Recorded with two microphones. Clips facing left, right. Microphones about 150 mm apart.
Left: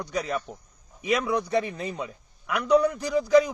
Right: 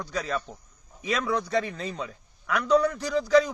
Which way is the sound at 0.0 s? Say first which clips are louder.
Left 1 dB; 20° left (ahead or behind).